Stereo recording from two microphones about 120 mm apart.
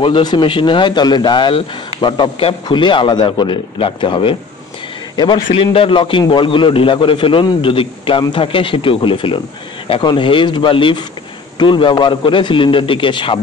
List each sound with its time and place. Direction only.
0.0 s a man's voice: 40° left (ahead or behind)